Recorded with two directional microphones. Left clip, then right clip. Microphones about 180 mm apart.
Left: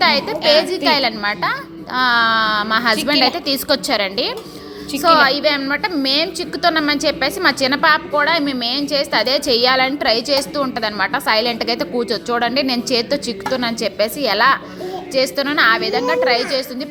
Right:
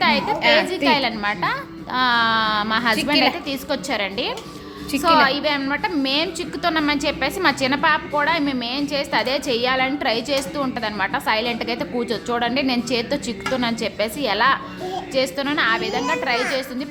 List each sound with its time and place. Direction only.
0.0 s a woman's voice: 20° left (ahead or behind)